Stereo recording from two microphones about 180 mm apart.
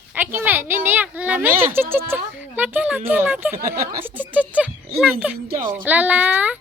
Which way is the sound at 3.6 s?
50° right (ahead or behind).